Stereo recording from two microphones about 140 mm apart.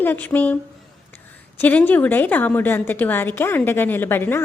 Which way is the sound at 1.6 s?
10° left (ahead or behind).